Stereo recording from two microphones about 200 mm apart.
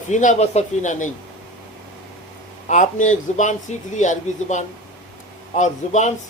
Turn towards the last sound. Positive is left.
turn(degrees=35)  # may be behind; listen again after turning